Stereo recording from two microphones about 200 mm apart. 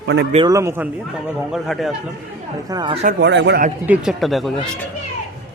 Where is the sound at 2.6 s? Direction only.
20° right (ahead or behind).